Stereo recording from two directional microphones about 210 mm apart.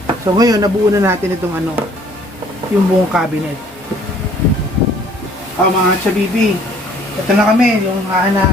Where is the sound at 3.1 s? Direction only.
Centre (ahead or behind).